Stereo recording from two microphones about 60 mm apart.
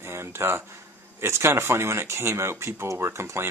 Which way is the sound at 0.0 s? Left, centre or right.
Right.